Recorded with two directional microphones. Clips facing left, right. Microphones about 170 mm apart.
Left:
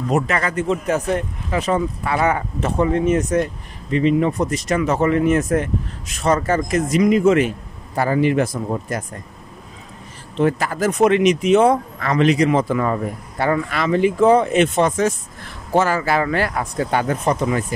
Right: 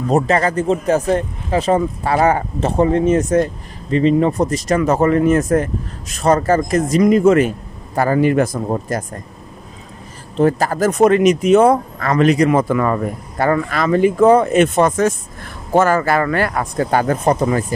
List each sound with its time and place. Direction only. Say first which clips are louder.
0.1 s speech: right 5 dB; 35° right (ahead or behind)
10.3 s speech: right 4 dB; 40° right (ahead or behind); by 13.0 s 65° right (ahead or behind)
13.4 s speech: right 3 dB; 45° right (ahead or behind)